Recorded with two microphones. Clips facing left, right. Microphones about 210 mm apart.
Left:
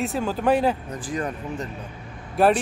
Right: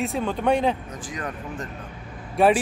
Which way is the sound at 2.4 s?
Centre (ahead or behind).